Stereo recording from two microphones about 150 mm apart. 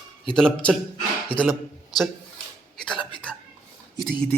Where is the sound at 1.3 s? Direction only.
40° left (ahead or behind).